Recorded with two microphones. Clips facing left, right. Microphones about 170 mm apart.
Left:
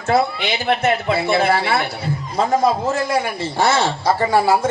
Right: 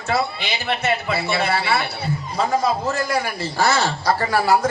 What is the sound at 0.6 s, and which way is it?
Speech, 50° left (ahead or behind).